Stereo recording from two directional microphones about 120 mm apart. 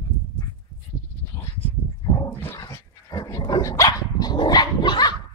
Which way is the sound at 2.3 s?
15° left (ahead or behind).